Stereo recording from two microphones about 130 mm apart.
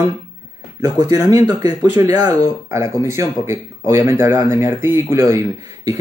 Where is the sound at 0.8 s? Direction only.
30° right (ahead or behind).